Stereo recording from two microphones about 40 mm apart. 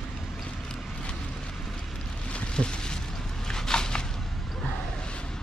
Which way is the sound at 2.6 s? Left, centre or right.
Left.